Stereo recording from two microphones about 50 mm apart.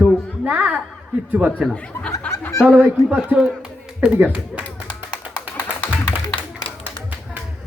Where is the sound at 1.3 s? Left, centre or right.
Right.